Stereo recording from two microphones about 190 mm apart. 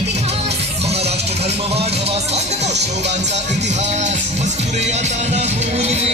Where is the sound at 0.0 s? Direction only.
35° right (ahead or behind).